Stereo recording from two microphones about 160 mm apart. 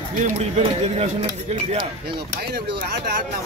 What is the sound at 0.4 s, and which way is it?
Speech, 40° right (ahead or behind).